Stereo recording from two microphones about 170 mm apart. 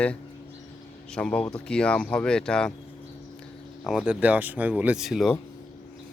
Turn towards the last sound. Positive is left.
turn(degrees=0)  # may be behind; listen again after turning